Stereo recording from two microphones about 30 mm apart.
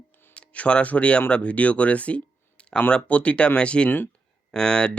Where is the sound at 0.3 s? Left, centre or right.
Left.